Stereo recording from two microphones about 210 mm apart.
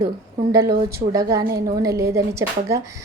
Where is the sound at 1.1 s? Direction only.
15° right (ahead or behind).